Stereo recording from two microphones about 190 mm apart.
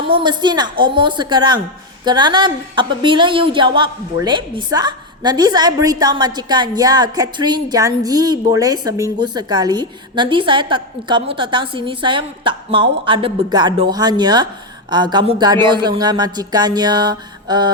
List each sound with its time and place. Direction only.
0.1 s a woman's voice: 25° right (ahead or behind)